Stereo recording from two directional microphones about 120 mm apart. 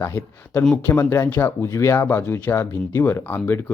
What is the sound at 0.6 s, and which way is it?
Speech, 5° left (ahead or behind).